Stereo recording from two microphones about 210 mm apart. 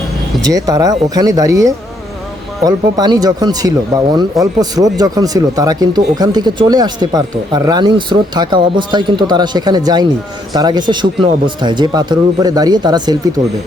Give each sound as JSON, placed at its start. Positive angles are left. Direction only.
{"t": 0.4, "sound": "speech", "side_deg": -15}